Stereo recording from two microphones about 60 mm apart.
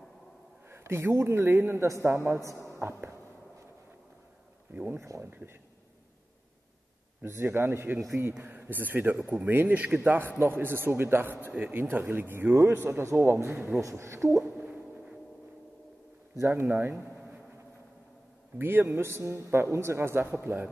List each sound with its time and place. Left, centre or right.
0.7 s a man's voice: right
1.9 s a man's voice: right
2.7 s a sound: right
4.9 s a man's voice: right
5.3 s speech: right
7.2 s speech: right
13.7 s a man's voice: right
14.7 s a sound: centre
16.3 s a man's voice: right
18.6 s a man's voice: right